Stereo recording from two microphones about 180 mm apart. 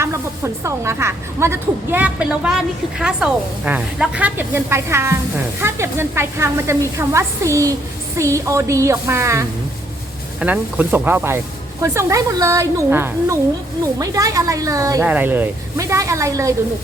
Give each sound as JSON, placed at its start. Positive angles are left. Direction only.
{"t": 0.0, "sound": "a woman's voice", "side_deg": -15}